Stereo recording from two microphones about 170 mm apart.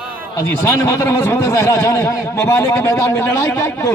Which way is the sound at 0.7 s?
20° left (ahead or behind).